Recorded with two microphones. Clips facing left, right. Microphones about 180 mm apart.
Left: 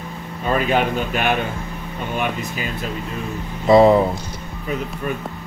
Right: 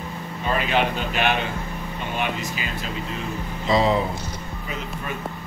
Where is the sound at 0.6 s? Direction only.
45° left (ahead or behind).